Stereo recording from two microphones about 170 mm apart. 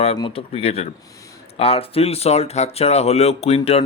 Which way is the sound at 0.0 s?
35° left (ahead or behind).